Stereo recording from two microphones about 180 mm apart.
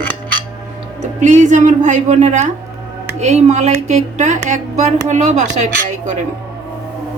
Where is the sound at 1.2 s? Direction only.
45° right (ahead or behind).